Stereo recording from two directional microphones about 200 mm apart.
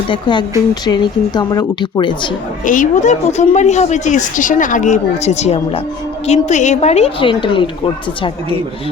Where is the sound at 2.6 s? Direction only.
40° left (ahead or behind); by 7.7 s 25° left (ahead or behind).